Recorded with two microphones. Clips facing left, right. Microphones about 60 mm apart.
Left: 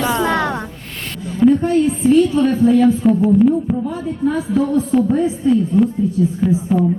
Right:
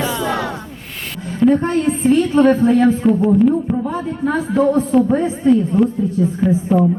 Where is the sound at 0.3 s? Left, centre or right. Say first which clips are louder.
Left 3 dB; left.